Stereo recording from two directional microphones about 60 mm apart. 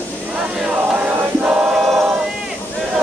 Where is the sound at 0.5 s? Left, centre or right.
Centre.